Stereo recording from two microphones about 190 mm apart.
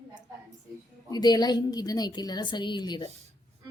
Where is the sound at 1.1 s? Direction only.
20° left (ahead or behind).